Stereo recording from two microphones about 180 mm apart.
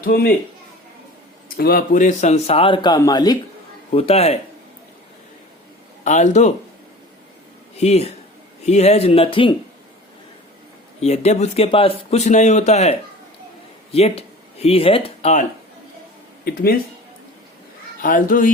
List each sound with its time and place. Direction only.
0.0 s a man's voice: 60° left (ahead or behind)
1.5 s speech: 55° left (ahead or behind); by 3.3 s 20° left (ahead or behind)
3.9 s speech: 35° left (ahead or behind)
6.1 s speech: 40° left (ahead or behind)
7.8 s speech: 35° left (ahead or behind)
11.0 s speech: 35° left (ahead or behind)
18.0 s a child's voice: 50° left (ahead or behind)